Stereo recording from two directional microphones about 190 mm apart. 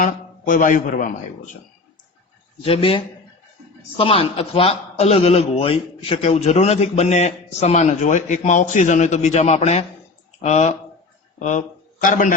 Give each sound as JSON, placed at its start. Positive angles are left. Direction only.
{"t": 0.0, "sound": "a man's voice", "side_deg": 45}
{"t": 2.6, "sound": "a man's voice", "side_deg": 30}